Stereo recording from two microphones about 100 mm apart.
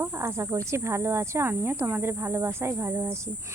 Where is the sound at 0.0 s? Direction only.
30° right (ahead or behind).